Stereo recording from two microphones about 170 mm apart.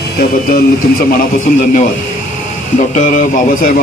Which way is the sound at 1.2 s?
50° left (ahead or behind).